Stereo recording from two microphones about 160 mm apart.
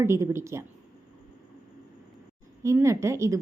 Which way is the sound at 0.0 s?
15° right (ahead or behind).